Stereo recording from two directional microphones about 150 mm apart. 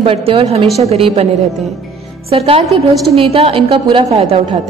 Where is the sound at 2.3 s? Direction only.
40° right (ahead or behind).